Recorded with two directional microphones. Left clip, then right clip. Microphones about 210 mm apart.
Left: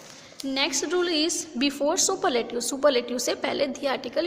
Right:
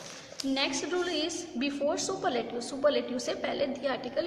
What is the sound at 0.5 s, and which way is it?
A woman's voice, 50° left (ahead or behind).